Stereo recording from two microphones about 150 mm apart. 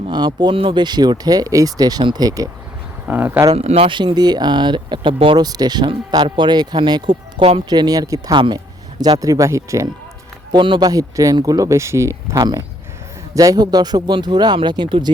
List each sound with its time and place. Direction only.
0.1 s speech: 30° right (ahead or behind)
3.1 s speech: 15° right (ahead or behind)
3.5 s speech: 45° right (ahead or behind)